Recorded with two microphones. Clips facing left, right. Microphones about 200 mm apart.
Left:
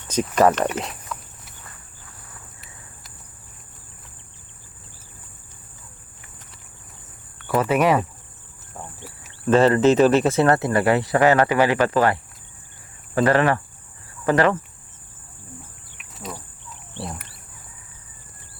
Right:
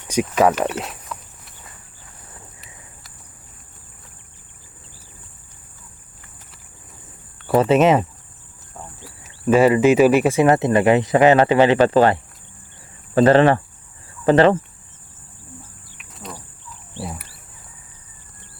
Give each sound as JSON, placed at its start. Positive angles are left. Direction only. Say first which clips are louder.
{"t": 0.1, "sound": "cricket", "louder": "right 1 dB", "side_deg": -10}
{"t": 7.3, "sound": "speech", "louder": "right 5 dB", "side_deg": -25}
{"t": 9.5, "sound": "speech", "louder": "right 2 dB", "side_deg": -10}
{"t": 16.0, "sound": "insect", "louder": "left 1 dB", "side_deg": 0}
{"t": 17.0, "sound": "a sound", "louder": "right 2 dB", "side_deg": -5}